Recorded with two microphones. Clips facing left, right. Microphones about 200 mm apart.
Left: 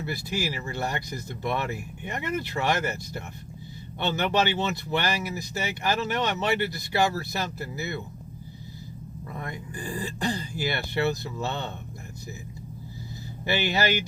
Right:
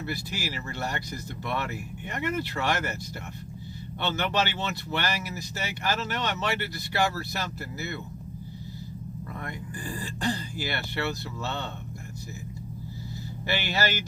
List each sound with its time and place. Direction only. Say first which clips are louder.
0.0 s speech: left 3 dB; 15° left (ahead or behind)
4.0 s speech: left 3 dB; 15° left (ahead or behind)
9.4 s speech: left 3 dB; 15° left (ahead or behind)
13.5 s speech: left 3 dB; 15° left (ahead or behind)